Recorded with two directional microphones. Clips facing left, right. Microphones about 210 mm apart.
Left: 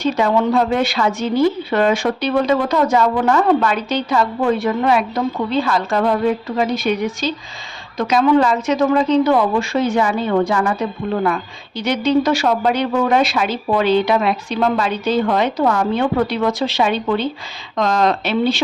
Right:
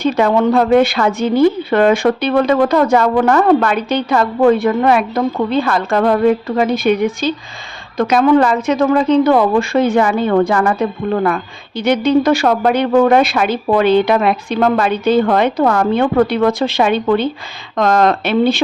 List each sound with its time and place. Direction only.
0.0 s a woman's voice: 55° right (ahead or behind)